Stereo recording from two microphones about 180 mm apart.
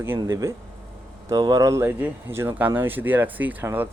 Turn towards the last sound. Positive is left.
turn(degrees=-10)  # may be behind; listen again after turning